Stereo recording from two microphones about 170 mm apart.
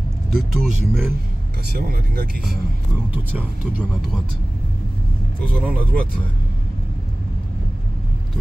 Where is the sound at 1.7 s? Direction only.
65° right (ahead or behind).